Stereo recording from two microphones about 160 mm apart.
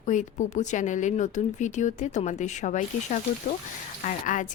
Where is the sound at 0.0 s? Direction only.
50° left (ahead or behind).